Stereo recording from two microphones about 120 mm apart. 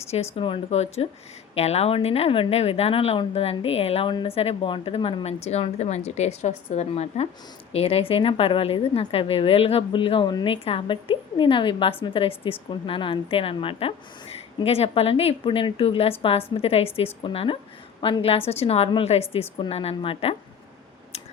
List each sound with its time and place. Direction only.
0.1 s a woman's voice: 55° left (ahead or behind)
5.2 s a woman's voice: 65° left (ahead or behind); by 20.3 s 50° left (ahead or behind)